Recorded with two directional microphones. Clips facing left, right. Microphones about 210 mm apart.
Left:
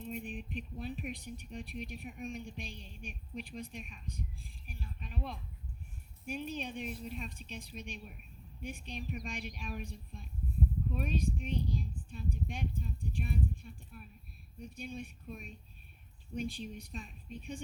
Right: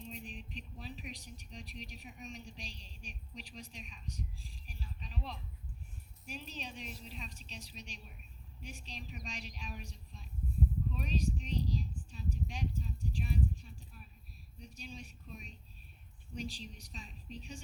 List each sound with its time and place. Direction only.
0.1 s speech: 55° left (ahead or behind)